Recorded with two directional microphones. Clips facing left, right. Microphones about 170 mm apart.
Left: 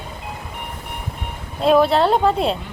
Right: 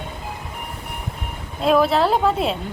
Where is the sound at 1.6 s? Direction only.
Centre (ahead or behind).